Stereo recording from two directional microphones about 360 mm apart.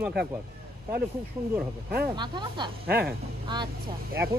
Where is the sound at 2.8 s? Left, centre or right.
Right.